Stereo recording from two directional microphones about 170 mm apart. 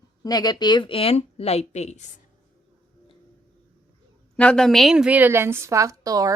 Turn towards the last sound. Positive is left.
turn(degrees=-20)  # may be behind; listen again after turning